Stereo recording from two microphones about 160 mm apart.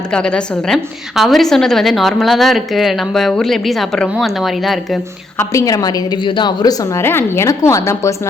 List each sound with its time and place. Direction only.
0.1 s a woman's voice: 5° left (ahead or behind)
5.4 s a woman's voice: 20° left (ahead or behind)